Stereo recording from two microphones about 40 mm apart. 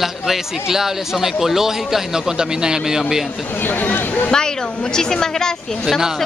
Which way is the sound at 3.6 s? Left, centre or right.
Left.